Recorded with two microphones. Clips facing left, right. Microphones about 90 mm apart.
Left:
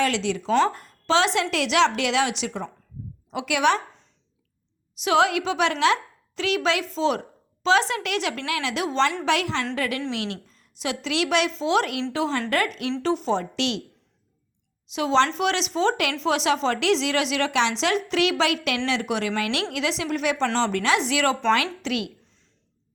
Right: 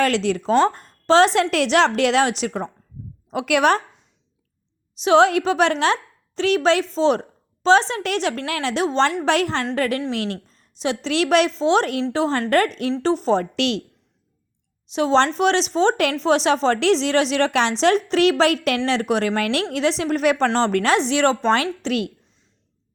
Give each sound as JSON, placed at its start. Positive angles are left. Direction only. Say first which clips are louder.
{"t": 0.0, "sound": "speech", "louder": "right 4 dB", "side_deg": -45}
{"t": 5.0, "sound": "speech", "louder": "right 5 dB", "side_deg": -35}
{"t": 14.9, "sound": "speech", "louder": "right 3 dB", "side_deg": -35}
{"t": 21.0, "sound": "speech", "louder": "right 4 dB", "side_deg": -35}